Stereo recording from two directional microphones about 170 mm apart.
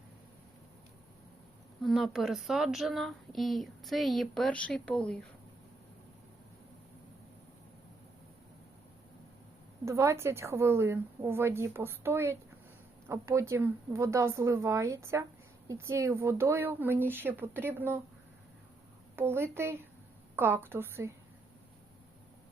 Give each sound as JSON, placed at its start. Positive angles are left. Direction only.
{"t": 1.8, "sound": "speech", "side_deg": 0}
{"t": 9.8, "sound": "a woman's voice", "side_deg": -15}
{"t": 19.1, "sound": "a woman's voice", "side_deg": -15}